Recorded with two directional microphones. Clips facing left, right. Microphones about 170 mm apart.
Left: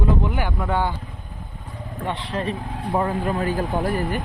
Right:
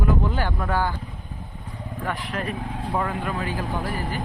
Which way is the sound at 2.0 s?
25° left (ahead or behind).